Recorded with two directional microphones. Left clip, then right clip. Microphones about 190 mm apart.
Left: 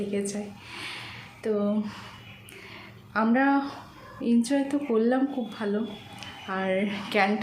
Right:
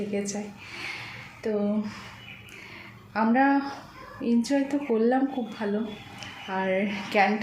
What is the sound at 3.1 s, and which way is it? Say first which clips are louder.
A woman's voice: right 1 dB; 5° left (ahead or behind).